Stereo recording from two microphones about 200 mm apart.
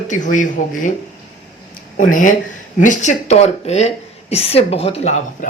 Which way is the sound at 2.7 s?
40° left (ahead or behind).